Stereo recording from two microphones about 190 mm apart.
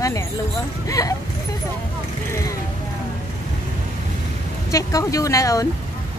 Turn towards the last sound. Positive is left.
turn(degrees=20)  # may be behind; listen again after turning